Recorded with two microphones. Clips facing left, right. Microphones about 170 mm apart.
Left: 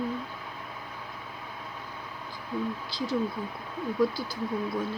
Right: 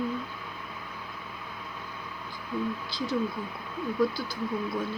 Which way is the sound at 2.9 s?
35° left (ahead or behind).